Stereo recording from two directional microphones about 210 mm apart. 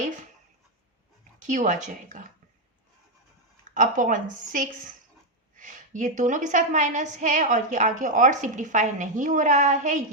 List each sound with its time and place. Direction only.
1.5 s a woman's voice: 35° right (ahead or behind)
3.8 s a woman's voice: 40° right (ahead or behind)